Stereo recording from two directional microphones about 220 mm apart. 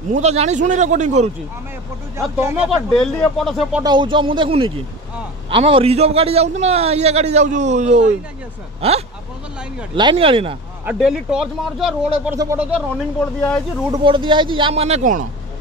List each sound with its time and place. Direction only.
0.1 s a man's voice: 30° right (ahead or behind)
2.2 s speech: 5° right (ahead or behind)
3.8 s a man's voice: 20° right (ahead or behind)
10.9 s speech: centre (ahead or behind)
14.0 s a man's voice: 20° right (ahead or behind)